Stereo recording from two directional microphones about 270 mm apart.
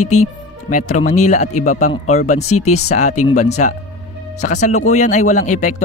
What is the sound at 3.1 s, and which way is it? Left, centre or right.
Speech, left.